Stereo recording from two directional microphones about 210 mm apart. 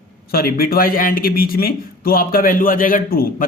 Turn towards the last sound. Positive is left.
turn(degrees=45)  # may be behind; listen again after turning